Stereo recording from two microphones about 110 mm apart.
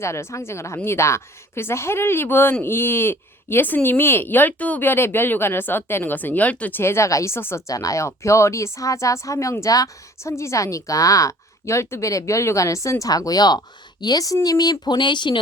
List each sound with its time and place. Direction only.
0.0 s a woman's voice: 25° left (ahead or behind); by 15.4 s 45° left (ahead or behind)